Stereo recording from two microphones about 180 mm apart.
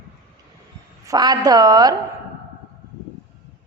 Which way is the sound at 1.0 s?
20° right (ahead or behind).